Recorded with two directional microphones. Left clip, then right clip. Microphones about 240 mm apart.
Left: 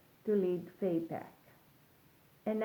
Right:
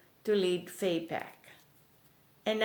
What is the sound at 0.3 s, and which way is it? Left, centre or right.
Speech, right.